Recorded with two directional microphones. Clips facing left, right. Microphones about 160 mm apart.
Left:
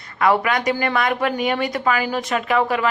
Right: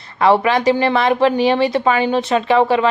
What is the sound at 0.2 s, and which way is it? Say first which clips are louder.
Speech: right 4 dB; 30° right (ahead or behind).